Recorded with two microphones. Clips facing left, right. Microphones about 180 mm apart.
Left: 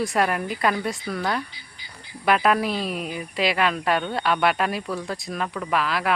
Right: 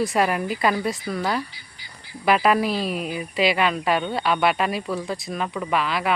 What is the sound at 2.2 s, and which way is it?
A woman's voice, centre (ahead or behind).